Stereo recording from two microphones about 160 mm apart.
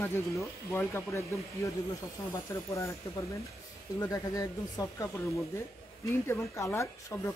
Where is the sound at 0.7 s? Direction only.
15° left (ahead or behind).